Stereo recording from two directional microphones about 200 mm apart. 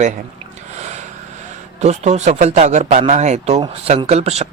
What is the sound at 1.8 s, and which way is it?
Speech, 35° right (ahead or behind).